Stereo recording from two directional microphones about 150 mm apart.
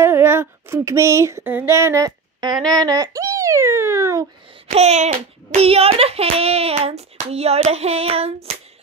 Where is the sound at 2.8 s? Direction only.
25° right (ahead or behind).